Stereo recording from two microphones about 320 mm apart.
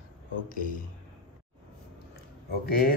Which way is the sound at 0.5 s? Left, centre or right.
Left.